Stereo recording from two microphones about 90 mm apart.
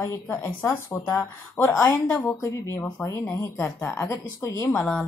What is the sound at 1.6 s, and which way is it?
A woman's voice, 35° left (ahead or behind).